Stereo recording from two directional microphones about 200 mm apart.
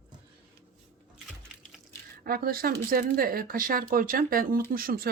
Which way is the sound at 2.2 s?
50° right (ahead or behind).